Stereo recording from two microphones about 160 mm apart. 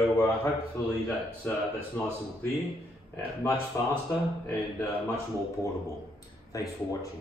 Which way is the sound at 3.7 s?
15° left (ahead or behind).